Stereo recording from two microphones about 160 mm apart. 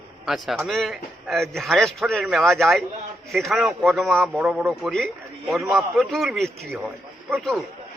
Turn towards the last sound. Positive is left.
turn(degrees=0)  # may be behind; listen again after turning